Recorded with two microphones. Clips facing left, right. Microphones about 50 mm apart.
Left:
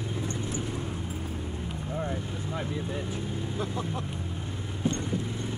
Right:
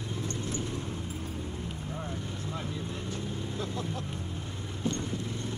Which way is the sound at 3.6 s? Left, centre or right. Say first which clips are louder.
Left 3 dB; centre.